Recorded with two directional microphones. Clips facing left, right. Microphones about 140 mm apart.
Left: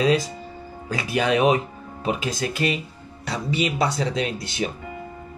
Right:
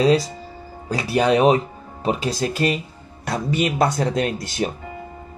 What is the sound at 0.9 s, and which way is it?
Speech, 35° right (ahead or behind).